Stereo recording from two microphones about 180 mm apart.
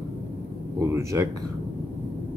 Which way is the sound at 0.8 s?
15° right (ahead or behind).